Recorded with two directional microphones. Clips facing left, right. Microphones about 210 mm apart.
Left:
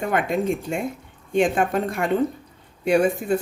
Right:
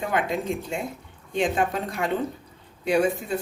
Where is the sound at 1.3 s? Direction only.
50° left (ahead or behind).